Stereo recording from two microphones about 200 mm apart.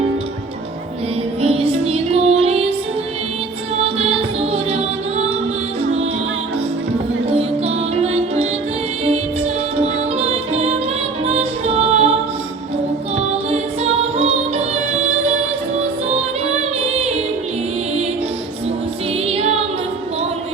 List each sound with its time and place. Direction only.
1.4 s music: 30° right (ahead or behind)
3.8 s music: 30° right (ahead or behind)
7.3 s music: 30° right (ahead or behind)
13.1 s music: 30° right (ahead or behind)
15.8 s music: 30° right (ahead or behind)